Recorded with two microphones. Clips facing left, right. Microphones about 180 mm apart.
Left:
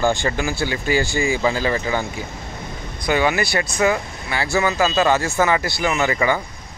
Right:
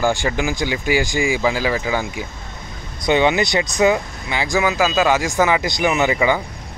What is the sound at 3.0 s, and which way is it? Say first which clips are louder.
Speech: right 3 dB; 20° right (ahead or behind).